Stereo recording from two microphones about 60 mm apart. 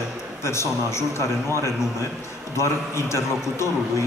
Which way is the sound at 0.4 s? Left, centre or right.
Left.